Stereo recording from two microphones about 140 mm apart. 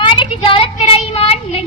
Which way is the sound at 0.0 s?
35° left (ahead or behind).